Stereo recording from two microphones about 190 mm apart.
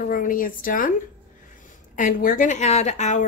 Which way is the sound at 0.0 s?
45° left (ahead or behind).